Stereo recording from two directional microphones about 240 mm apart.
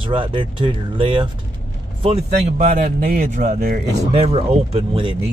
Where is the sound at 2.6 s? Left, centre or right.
Right.